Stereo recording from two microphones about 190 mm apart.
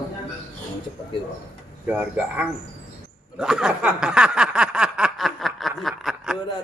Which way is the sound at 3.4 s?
5° right (ahead or behind).